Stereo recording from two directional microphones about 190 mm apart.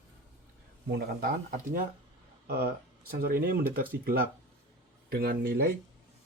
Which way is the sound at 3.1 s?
50° right (ahead or behind).